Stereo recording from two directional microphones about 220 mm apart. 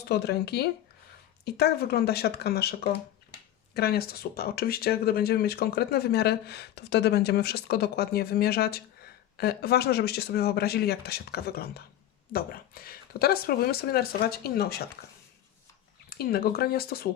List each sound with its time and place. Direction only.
0.0 s speech: 45° left (ahead or behind)
16.0 s speech: 45° left (ahead or behind)